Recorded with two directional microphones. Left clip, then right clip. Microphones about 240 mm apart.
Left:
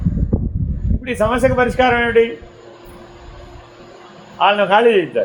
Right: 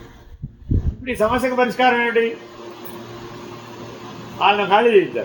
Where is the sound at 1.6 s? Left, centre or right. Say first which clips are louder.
Left 2 dB; left.